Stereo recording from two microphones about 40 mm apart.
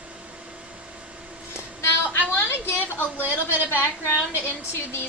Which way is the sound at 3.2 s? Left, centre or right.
Right.